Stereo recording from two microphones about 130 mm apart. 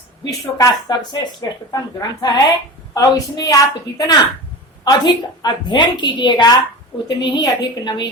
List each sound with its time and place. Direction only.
0.6 s a woman's voice: 30° left (ahead or behind)